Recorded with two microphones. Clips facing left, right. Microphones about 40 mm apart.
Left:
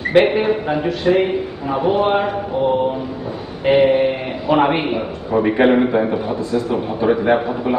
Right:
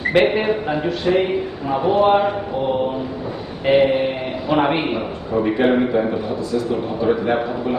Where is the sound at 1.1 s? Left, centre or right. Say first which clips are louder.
Left 2 dB; centre.